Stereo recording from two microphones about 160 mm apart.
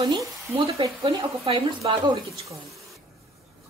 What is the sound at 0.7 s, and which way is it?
Speech, 35° right (ahead or behind).